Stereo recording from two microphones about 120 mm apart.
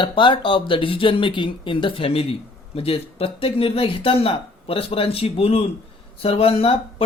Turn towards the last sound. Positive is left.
turn(degrees=50)  # may be behind; listen again after turning